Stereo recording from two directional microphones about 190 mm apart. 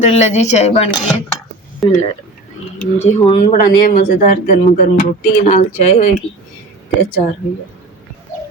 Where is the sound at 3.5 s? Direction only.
40° left (ahead or behind).